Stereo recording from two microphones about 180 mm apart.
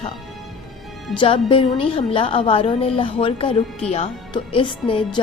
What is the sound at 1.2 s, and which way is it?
A woman's voice, 30° left (ahead or behind).